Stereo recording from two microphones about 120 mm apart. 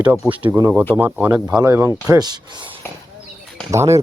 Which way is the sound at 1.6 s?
20° right (ahead or behind).